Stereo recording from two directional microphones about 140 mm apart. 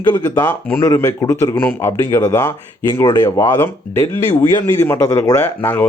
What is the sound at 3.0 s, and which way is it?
Speech, 30° left (ahead or behind).